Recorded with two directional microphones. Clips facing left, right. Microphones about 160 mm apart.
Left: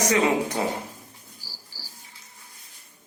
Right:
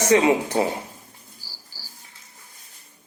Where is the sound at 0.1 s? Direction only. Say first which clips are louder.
Right 7 dB; 30° right (ahead or behind).